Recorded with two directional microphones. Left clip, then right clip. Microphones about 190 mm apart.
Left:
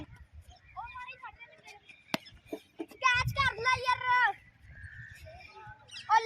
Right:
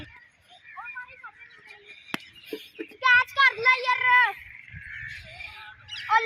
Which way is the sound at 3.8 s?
70° left (ahead or behind).